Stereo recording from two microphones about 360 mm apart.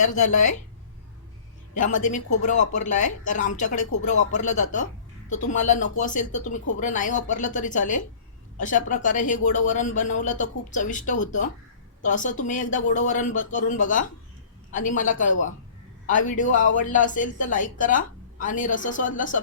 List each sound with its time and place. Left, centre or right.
0.0 s speech: left
1.7 s speech: left